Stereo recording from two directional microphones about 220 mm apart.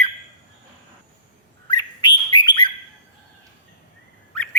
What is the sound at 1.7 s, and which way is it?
Bird, 20° left (ahead or behind).